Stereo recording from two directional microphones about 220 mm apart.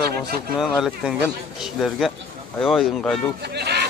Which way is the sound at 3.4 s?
50° right (ahead or behind).